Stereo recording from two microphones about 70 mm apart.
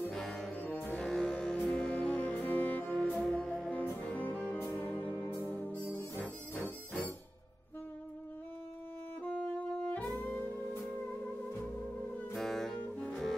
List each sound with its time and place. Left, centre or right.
0.1 s music: centre
0.6 s music: left
0.9 s music: centre
3.0 s music: centre
4.0 s music: left
10.0 s music: left
12.4 s music: centre